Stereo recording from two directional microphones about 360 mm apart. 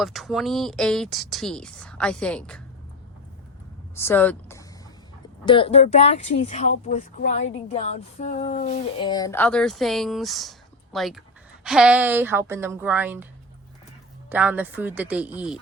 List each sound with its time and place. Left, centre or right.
0.0 s speech: centre
3.9 s speech: centre
14.3 s speech: centre